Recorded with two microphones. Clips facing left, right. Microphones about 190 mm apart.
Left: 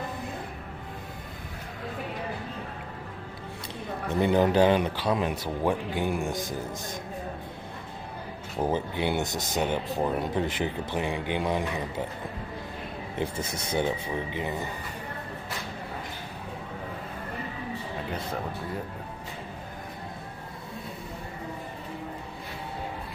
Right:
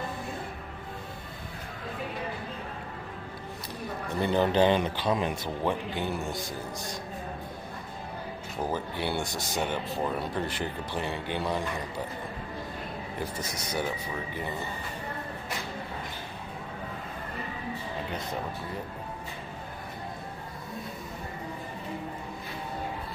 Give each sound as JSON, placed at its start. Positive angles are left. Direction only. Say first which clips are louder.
{"t": 4.1, "sound": "speech", "louder": "left 3 dB", "side_deg": 15}
{"t": 8.5, "sound": "speech", "louder": "left 4 dB", "side_deg": 20}
{"t": 13.2, "sound": "speech", "louder": "left 5 dB", "side_deg": 30}